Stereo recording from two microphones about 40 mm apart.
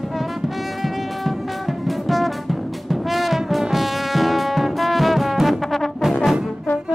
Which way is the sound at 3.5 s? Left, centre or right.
Centre.